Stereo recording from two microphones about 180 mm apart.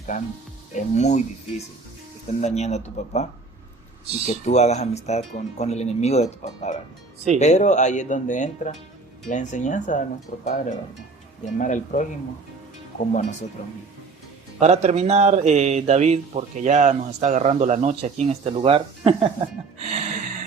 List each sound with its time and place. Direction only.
0.7 s speech: 40° left (ahead or behind)
4.3 s speech: 40° left (ahead or behind)
13.6 s speech: 35° left (ahead or behind)
14.6 s speech: 40° right (ahead or behind)
19.9 s a sound: 40° right (ahead or behind)